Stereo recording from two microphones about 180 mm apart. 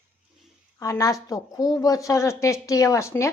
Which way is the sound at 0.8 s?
20° left (ahead or behind).